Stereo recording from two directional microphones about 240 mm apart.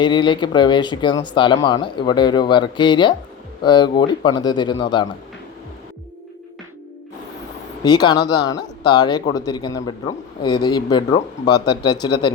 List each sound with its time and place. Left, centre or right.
0.0 s speech: centre
7.9 s speech: centre